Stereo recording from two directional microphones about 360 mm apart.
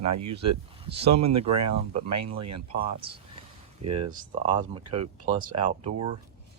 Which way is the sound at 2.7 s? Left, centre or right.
Centre.